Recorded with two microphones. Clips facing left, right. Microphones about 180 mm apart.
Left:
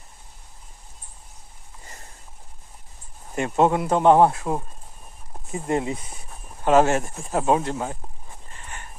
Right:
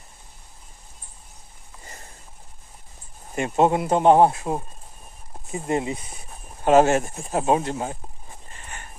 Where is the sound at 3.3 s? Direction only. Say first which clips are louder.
Even; 20° right (ahead or behind).